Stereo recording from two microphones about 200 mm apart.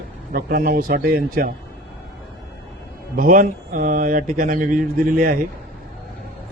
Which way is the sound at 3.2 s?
45° right (ahead or behind).